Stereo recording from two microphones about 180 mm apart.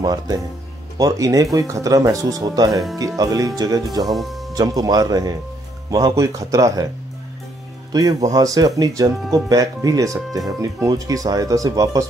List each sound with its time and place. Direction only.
0.0 s speech: 20° right (ahead or behind)
4.0 s speech: centre (ahead or behind)
4.6 s speech: 20° right (ahead or behind)
7.9 s speech: 20° right (ahead or behind)